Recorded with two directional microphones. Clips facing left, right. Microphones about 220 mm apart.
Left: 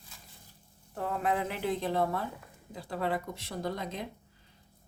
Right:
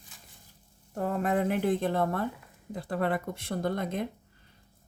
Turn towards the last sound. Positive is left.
turn(degrees=-50)  # may be behind; listen again after turning